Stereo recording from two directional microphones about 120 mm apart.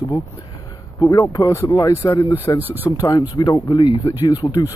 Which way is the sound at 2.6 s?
15° right (ahead or behind).